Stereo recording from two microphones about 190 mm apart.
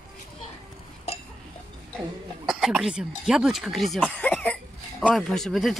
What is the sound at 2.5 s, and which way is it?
Speech, 5° right (ahead or behind).